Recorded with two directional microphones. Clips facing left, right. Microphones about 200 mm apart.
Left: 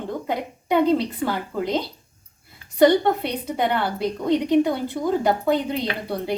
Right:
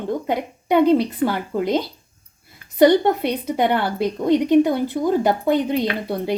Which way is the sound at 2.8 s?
20° right (ahead or behind).